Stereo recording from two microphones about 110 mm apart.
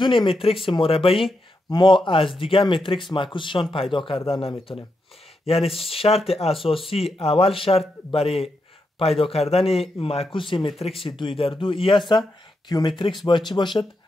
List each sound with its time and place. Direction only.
0.0 s a man's voice: 50° left (ahead or behind)
1.7 s a man's voice: 45° left (ahead or behind)
12.6 s speech: 40° left (ahead or behind)